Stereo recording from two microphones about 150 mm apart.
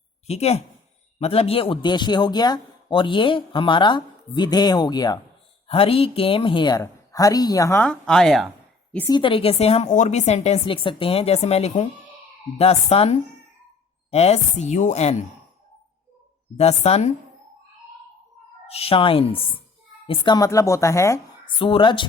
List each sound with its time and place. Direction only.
0.3 s a woman's voice: 45° left (ahead or behind); by 5.2 s 25° left (ahead or behind)
5.6 s a woman's voice: 40° left (ahead or behind); by 7.9 s 20° left (ahead or behind)
7.9 s speech: 5° left (ahead or behind)
9.0 s a woman's voice: 30° left (ahead or behind); by 15.1 s 50° left (ahead or behind)
16.6 s a woman's voice: 45° left (ahead or behind)
18.7 s a man's voice: 40° left (ahead or behind); by 21.2 s 20° left (ahead or behind)
21.4 s a man's voice: 35° left (ahead or behind)